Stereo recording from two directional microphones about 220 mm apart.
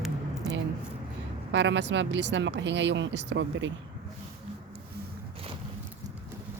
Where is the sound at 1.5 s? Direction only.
55° right (ahead or behind).